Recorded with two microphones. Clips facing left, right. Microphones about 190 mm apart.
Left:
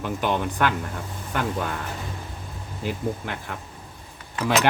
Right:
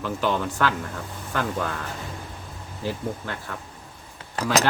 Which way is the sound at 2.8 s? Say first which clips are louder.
Left 1 dB; 15° left (ahead or behind).